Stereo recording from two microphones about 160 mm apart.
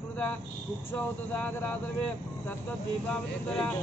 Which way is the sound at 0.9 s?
10° left (ahead or behind).